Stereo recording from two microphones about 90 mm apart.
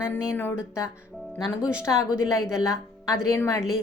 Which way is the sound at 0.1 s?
25° left (ahead or behind).